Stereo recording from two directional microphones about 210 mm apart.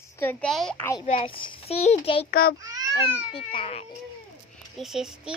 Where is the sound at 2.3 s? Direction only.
45° left (ahead or behind).